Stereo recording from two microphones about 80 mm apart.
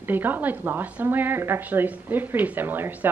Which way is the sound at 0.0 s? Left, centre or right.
Right.